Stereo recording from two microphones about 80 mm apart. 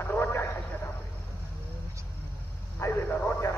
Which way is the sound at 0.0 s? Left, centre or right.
Left.